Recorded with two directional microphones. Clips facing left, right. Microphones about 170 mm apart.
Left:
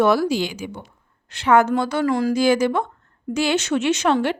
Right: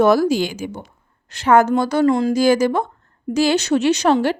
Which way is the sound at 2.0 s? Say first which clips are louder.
Right 4 dB; 25° right (ahead or behind).